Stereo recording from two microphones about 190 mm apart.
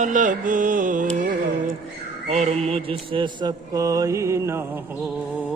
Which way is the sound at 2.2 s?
35° right (ahead or behind).